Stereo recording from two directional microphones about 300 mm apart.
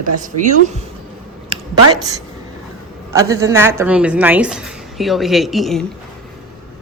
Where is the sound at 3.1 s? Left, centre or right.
Centre.